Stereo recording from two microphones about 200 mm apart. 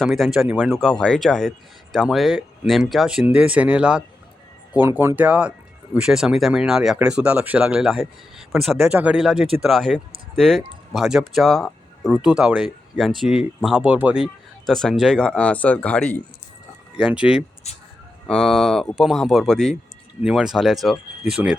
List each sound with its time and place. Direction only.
0.0 s speech: centre (ahead or behind)
17.0 s speech: 5° right (ahead or behind)
17.7 s speech: 35° left (ahead or behind)
18.3 s speech: centre (ahead or behind)